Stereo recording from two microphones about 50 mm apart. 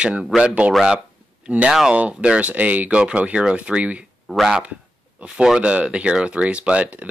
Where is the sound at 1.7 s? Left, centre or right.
Centre.